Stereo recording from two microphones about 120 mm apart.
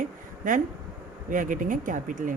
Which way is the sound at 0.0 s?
90° right.